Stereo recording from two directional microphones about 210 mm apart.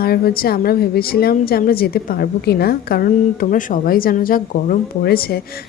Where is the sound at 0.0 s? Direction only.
45° left (ahead or behind).